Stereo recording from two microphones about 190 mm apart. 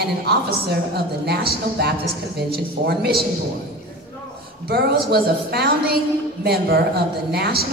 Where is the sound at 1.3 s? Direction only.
60° right (ahead or behind).